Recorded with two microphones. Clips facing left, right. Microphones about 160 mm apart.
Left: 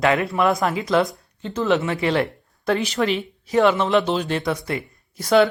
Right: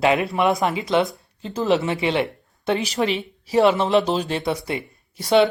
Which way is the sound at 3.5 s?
35° right (ahead or behind).